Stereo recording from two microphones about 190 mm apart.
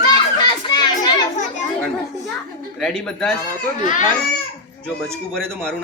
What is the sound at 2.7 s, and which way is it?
Speech, 5° left (ahead or behind).